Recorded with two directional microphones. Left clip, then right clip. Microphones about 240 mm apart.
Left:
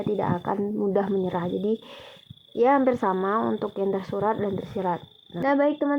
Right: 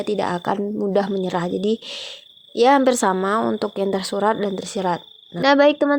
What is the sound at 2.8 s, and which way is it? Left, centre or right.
Speech, right.